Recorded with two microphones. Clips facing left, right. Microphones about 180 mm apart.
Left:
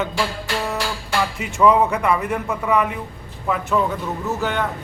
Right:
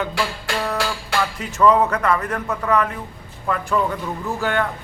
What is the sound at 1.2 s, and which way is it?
A man's voice, 10° left (ahead or behind).